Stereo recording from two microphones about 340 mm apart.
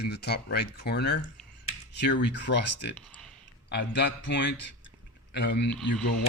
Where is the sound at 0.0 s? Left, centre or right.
Left.